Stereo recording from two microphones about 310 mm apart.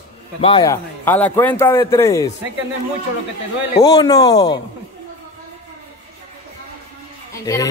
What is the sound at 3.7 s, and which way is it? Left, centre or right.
Speech, centre.